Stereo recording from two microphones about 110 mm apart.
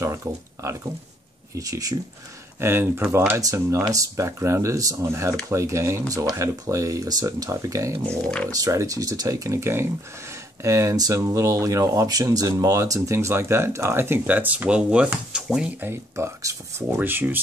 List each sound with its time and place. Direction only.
0.0 s speech: 25° right (ahead or behind)
2.6 s speech: 20° right (ahead or behind)
8.2 s speech: 5° left (ahead or behind)
8.5 s speech: 30° right (ahead or behind); by 15.7 s 10° right (ahead or behind)
15.8 s speech: 20° right (ahead or behind)